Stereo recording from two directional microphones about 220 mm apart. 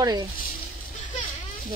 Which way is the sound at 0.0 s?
15° right (ahead or behind).